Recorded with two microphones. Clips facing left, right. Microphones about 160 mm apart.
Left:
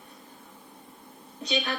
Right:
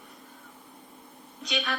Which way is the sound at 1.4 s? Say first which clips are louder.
Left 2 dB; 30° left (ahead or behind).